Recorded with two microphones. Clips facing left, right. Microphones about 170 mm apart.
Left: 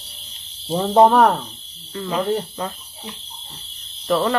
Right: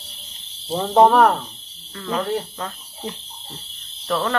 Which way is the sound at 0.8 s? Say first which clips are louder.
Left 1 dB; centre (ahead or behind).